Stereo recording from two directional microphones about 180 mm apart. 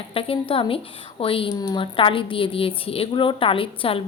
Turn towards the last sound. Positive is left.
turn(degrees=30)  # may be behind; listen again after turning